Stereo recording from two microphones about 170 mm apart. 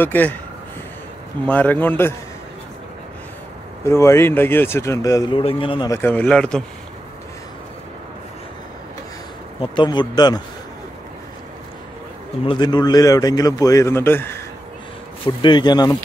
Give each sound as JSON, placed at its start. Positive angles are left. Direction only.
{"t": 0.0, "sound": "speech", "side_deg": 10}
{"t": 1.4, "sound": "speech", "side_deg": 10}
{"t": 3.8, "sound": "speech", "side_deg": 15}
{"t": 5.4, "sound": "a man's voice", "side_deg": 30}
{"t": 5.9, "sound": "speech", "side_deg": 15}
{"t": 9.6, "sound": "a man's voice", "side_deg": 25}
{"t": 12.4, "sound": "a man's voice", "side_deg": 25}
{"t": 15.2, "sound": "a man's voice", "side_deg": 25}